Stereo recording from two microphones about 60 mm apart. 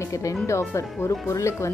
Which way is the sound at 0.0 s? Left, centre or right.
Left.